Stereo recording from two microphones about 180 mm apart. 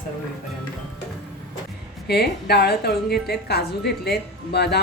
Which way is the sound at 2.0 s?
60° left (ahead or behind).